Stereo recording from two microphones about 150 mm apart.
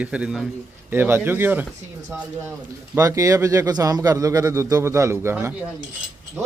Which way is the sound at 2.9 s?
20° right (ahead or behind).